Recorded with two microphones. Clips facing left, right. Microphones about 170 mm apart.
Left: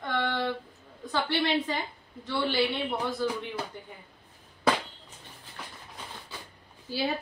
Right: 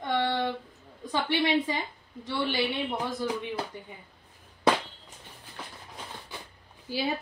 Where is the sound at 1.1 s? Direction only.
15° right (ahead or behind).